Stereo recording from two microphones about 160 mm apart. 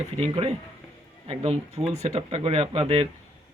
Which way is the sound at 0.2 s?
40° right (ahead or behind).